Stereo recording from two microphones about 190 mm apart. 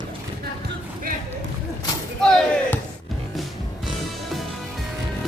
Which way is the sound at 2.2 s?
5° left (ahead or behind).